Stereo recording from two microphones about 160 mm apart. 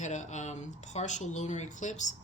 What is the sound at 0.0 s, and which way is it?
Speech, 50° left (ahead or behind).